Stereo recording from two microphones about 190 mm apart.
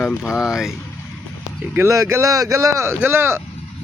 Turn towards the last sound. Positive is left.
turn(degrees=-10)  # may be behind; listen again after turning